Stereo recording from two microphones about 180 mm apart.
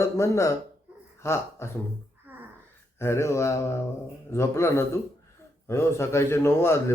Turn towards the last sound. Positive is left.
turn(degrees=15)  # may be behind; listen again after turning